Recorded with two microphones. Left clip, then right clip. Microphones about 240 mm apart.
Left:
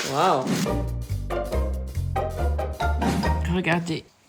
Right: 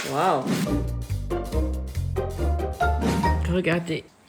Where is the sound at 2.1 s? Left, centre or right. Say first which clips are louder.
Left 2 dB; centre.